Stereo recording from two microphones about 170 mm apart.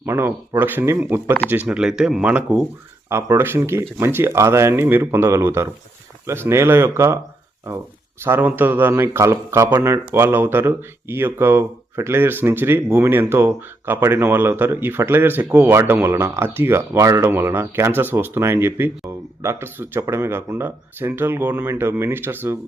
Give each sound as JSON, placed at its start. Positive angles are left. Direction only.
{"t": 0.0, "sound": "speech", "side_deg": -15}